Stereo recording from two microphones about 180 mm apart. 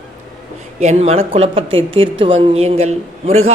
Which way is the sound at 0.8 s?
35° right (ahead or behind).